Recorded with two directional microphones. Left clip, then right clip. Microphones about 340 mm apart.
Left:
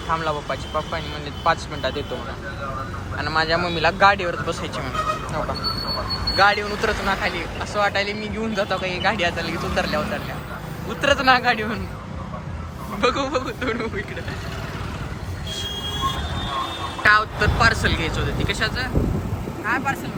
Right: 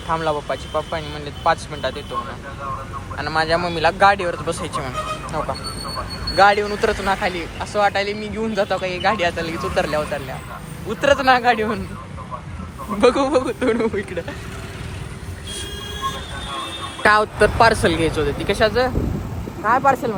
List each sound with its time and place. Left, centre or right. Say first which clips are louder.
0.1 s speech: right 3 dB; centre
3.2 s speech: right 1 dB; centre
13.0 s speech: right 6 dB; centre
17.0 s speech: right 2 dB; centre